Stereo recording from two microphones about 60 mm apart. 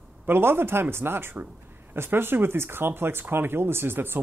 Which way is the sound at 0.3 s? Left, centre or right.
Right.